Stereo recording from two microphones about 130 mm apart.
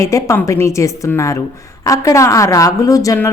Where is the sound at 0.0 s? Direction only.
25° left (ahead or behind).